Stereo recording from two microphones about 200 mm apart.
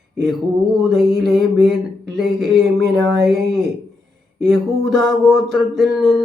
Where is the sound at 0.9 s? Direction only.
Centre (ahead or behind).